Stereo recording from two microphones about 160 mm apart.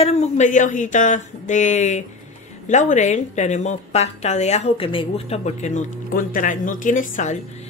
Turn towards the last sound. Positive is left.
turn(degrees=50)  # may be behind; listen again after turning